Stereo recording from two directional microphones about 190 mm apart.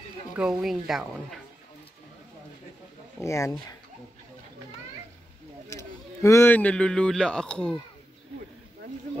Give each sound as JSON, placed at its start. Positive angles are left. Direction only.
{"t": 0.4, "sound": "speech", "side_deg": -5}
{"t": 3.2, "sound": "speech", "side_deg": 15}
{"t": 5.7, "sound": "a man's voice", "side_deg": 15}